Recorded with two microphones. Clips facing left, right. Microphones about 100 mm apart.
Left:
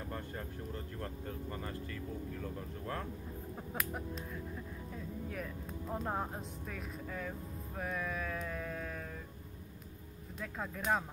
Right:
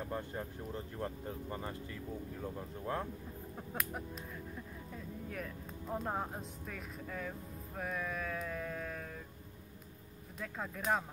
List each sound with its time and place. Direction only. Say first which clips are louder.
0.1 s speech: right 2 dB; 15° right (ahead or behind)
3.5 s music: even; centre (ahead or behind)
4.9 s speech: left 1 dB; centre (ahead or behind)
10.4 s speech: even; centre (ahead or behind)